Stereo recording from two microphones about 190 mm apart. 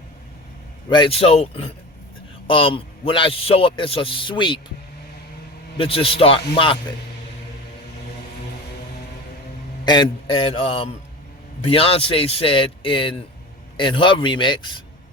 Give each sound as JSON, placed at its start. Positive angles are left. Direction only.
{"t": 0.9, "sound": "a man's voice", "side_deg": 25}
{"t": 5.7, "sound": "a man's voice", "side_deg": 30}
{"t": 9.8, "sound": "a man's voice", "side_deg": 25}